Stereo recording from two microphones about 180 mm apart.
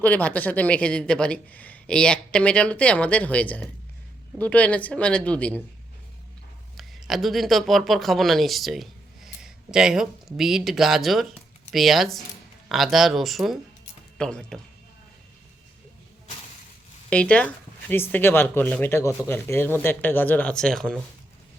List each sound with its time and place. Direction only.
0.0 s speech: 10° left (ahead or behind)
6.7 s speech: centre (ahead or behind)
17.1 s speech: 5° left (ahead or behind)